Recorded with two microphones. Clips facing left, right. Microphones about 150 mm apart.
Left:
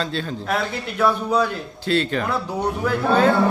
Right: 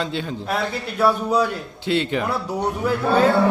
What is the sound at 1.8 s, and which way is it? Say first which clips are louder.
Speech: even; 15° right (ahead or behind).